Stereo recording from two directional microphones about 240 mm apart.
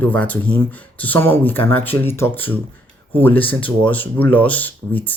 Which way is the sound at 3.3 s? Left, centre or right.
Left.